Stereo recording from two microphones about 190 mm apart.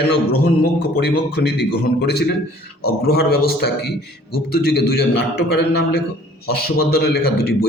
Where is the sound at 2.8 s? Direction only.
55° left (ahead or behind).